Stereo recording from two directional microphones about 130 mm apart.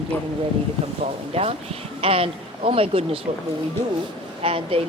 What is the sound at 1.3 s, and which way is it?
A man's voice, 50° right (ahead or behind).